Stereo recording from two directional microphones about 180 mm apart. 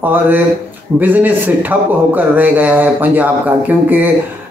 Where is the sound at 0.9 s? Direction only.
10° right (ahead or behind).